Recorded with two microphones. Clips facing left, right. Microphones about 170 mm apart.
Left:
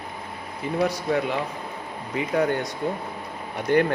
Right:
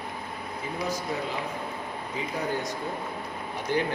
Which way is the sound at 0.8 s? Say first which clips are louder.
Left 8 dB; 65° left (ahead or behind).